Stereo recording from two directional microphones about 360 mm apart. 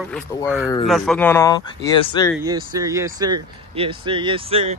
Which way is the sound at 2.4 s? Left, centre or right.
Centre.